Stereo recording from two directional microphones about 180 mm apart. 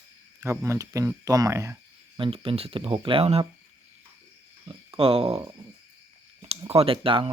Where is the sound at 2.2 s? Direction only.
30° right (ahead or behind).